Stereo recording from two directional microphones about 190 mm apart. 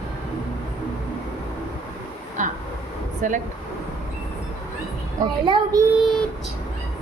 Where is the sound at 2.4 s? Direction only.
40° right (ahead or behind).